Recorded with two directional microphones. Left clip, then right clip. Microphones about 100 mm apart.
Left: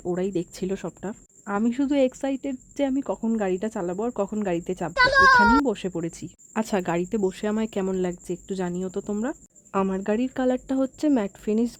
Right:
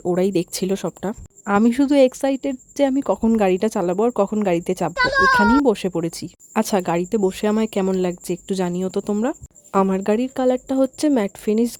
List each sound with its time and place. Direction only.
0.1 s speech: 45° right (ahead or behind)
2.0 s speech: 25° right (ahead or behind)
3.2 s speech: 45° right (ahead or behind)
4.9 s a child's voice: centre (ahead or behind)
5.6 s speech: 35° right (ahead or behind)
10.2 s speech: 20° right (ahead or behind)